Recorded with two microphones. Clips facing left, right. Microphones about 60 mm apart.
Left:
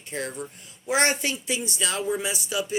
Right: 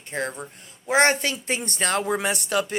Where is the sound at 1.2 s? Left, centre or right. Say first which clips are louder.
Right 2 dB; right.